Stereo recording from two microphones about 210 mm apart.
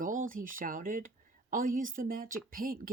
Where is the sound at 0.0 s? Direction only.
40° right (ahead or behind).